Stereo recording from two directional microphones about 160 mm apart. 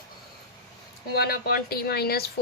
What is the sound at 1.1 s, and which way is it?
Speech, 75° left (ahead or behind).